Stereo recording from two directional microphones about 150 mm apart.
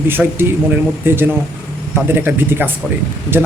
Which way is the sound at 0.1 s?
15° right (ahead or behind).